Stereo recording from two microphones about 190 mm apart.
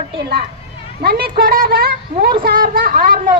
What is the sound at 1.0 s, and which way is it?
A woman's voice, 55° right (ahead or behind).